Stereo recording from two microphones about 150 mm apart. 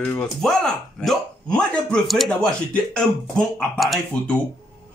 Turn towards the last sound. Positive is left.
turn(degrees=5)  # may be behind; listen again after turning